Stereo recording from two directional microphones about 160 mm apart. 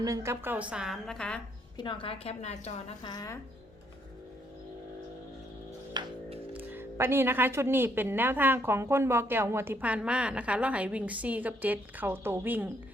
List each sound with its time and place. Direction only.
0.0 s a woman's voice: 20° right (ahead or behind); by 1.4 s 5° left (ahead or behind)
1.8 s a woman's voice: 30° left (ahead or behind)
3.0 s speech: 25° left (ahead or behind)
5.9 s music: 30° right (ahead or behind)
6.5 s a woman's voice: 10° right (ahead or behind)